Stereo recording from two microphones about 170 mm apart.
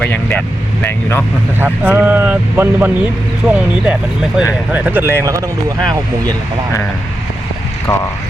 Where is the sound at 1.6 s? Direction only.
10° right (ahead or behind).